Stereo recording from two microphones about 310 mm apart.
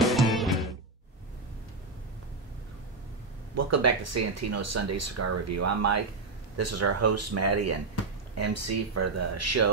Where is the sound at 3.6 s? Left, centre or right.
Right.